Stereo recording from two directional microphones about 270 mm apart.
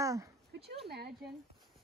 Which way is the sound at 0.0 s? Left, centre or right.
Centre.